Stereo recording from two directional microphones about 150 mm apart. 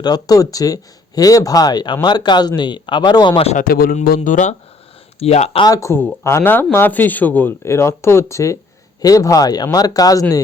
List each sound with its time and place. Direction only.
0.0 s speech: 25° left (ahead or behind)
3.6 s speech: 75° left (ahead or behind); by 4.5 s 55° left (ahead or behind)
5.2 s speech: 45° left (ahead or behind)
5.6 s speech: 20° left (ahead or behind)